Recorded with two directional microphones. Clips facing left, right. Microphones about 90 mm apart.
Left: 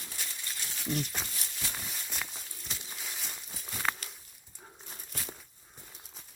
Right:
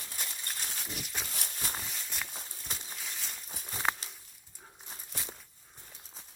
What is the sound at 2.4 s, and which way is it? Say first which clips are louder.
Walk: right 1 dB; 40° right (ahead or behind).